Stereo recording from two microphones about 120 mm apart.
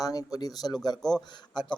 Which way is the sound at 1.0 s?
5° left (ahead or behind).